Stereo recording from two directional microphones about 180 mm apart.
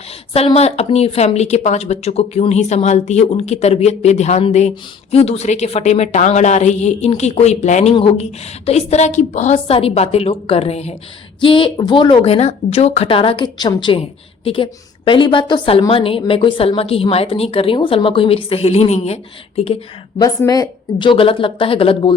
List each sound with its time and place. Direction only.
0.3 s speech: 35° left (ahead or behind)
20.2 s speech: 20° left (ahead or behind)